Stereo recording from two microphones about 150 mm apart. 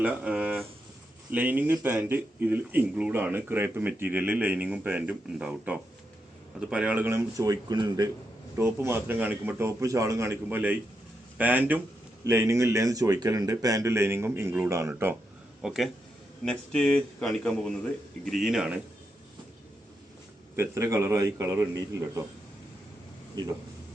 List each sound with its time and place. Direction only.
0.0 s speech: 10° right (ahead or behind)
15.6 s a man's voice: centre (ahead or behind)
20.6 s speech: 20° right (ahead or behind)
23.3 s a man's voice: 30° right (ahead or behind)